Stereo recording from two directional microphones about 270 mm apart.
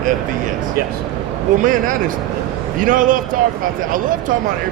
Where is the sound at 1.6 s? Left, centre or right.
Right.